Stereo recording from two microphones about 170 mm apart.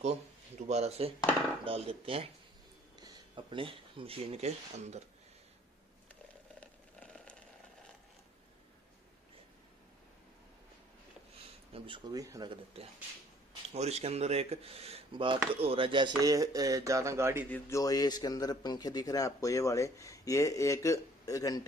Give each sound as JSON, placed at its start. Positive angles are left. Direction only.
{"t": 0.0, "sound": "speech", "side_deg": -40}
{"t": 6.6, "sound": "a sound", "side_deg": 5}
{"t": 11.7, "sound": "speech", "side_deg": -30}
{"t": 12.7, "sound": "speech", "side_deg": -35}
{"t": 17.5, "sound": "a man's voice", "side_deg": 15}